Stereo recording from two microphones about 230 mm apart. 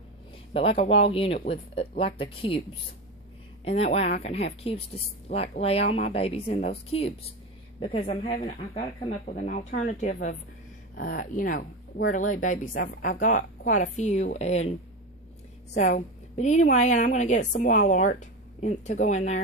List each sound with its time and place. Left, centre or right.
0.5 s speech: left
3.6 s a woman's voice: left
15.7 s a woman's voice: left